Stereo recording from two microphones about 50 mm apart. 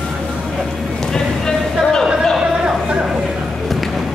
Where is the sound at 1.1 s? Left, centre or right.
Centre.